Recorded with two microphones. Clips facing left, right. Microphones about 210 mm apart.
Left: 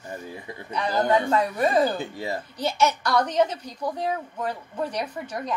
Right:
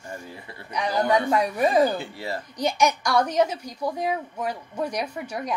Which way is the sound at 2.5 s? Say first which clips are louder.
Right 2 dB; 15° right (ahead or behind).